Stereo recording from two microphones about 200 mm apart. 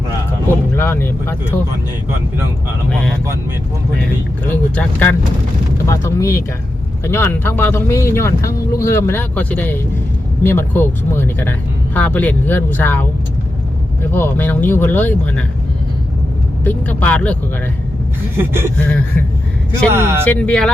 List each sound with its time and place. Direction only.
0.7 s speech: 10° left (ahead or behind)
4.4 s speech: 10° left (ahead or behind)
14.1 s speech: 10° left (ahead or behind)
16.6 s speech: 5° left (ahead or behind)
18.3 s a sound: 10° right (ahead or behind)
19.9 s a sound: 10° right (ahead or behind)
20.2 s speech: 5° left (ahead or behind)